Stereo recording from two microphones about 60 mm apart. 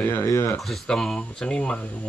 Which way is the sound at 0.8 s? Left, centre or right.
Centre.